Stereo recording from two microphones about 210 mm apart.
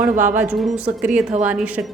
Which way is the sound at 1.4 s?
5° right (ahead or behind).